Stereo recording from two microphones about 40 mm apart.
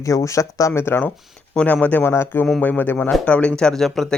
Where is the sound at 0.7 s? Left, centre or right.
Left.